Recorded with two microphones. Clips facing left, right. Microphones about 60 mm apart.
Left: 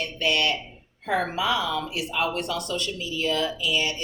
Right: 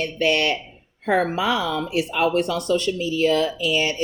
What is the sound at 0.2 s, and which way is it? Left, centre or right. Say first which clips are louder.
Speech: right 4 dB; right.